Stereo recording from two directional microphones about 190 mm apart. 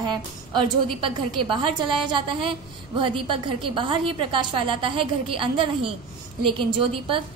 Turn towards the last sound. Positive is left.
turn(degrees=-30)  # may be behind; listen again after turning